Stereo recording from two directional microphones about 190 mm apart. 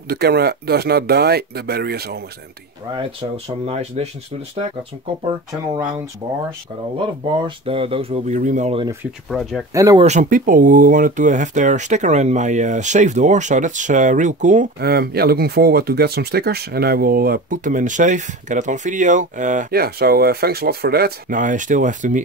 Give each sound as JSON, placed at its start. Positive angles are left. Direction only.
{"t": 0.1, "sound": "speech", "side_deg": -55}
{"t": 2.9, "sound": "speech", "side_deg": -30}
{"t": 7.2, "sound": "speech", "side_deg": -25}
{"t": 9.3, "sound": "speech", "side_deg": 0}
{"t": 9.8, "sound": "speech", "side_deg": -20}
{"t": 10.0, "sound": "speech", "side_deg": -45}
{"t": 14.8, "sound": "speech", "side_deg": -55}